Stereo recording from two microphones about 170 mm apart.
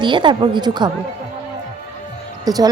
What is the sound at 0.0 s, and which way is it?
Speech, 30° right (ahead or behind).